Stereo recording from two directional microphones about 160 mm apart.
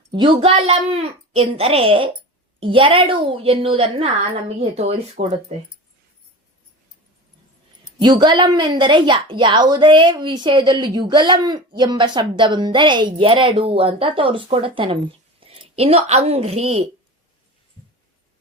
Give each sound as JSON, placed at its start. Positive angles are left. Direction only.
{"t": 0.1, "sound": "a woman's voice", "side_deg": -30}
{"t": 8.0, "sound": "a woman's voice", "side_deg": -30}